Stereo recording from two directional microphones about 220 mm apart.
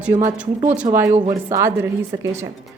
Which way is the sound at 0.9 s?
30° right (ahead or behind).